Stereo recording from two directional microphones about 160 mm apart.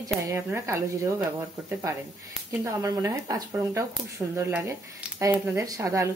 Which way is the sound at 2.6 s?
20° right (ahead or behind).